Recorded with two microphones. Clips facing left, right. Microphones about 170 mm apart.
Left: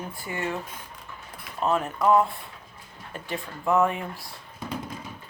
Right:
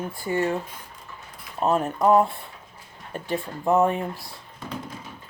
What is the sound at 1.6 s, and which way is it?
Speech, 35° right (ahead or behind).